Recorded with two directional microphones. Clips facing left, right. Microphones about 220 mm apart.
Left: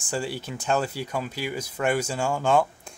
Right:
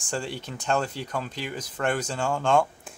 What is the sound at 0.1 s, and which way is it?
Speech, 5° left (ahead or behind).